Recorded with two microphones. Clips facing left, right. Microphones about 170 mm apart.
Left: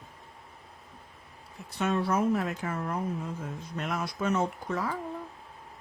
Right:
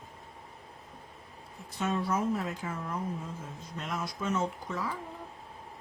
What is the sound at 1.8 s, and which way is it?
Speech, 70° left (ahead or behind).